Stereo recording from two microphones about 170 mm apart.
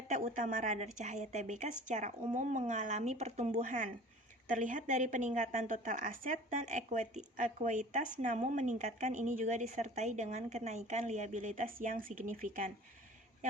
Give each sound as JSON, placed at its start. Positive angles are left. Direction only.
{"t": 0.1, "sound": "speech", "side_deg": -50}